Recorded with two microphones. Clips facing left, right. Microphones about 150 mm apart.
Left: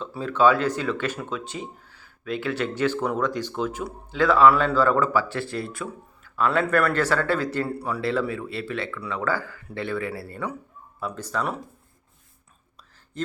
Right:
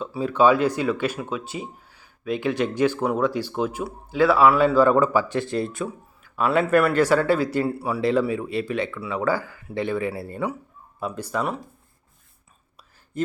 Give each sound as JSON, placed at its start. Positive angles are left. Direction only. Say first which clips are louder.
{"t": 0.0, "sound": "speech", "louder": "right 1 dB", "side_deg": -10}